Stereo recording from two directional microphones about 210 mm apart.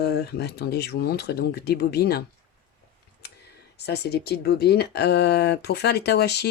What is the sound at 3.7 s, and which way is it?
Speech, 50° left (ahead or behind).